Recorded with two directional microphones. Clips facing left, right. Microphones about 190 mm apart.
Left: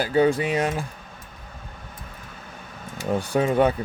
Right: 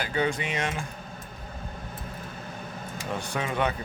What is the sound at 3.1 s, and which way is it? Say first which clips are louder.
Speech: left 9 dB; 35° left (ahead or behind).